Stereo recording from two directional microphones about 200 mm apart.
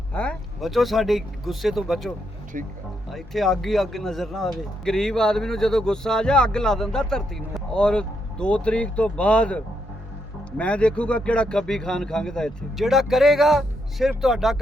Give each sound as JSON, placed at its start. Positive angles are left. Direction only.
{"t": 0.1, "sound": "speech", "side_deg": 5}
{"t": 2.5, "sound": "speech", "side_deg": -40}
{"t": 3.1, "sound": "speech", "side_deg": 0}